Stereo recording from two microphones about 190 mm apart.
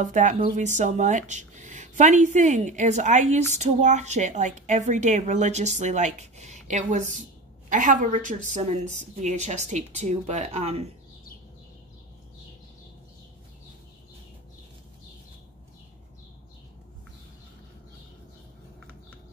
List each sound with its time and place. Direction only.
0.0 s speech: 40° right (ahead or behind)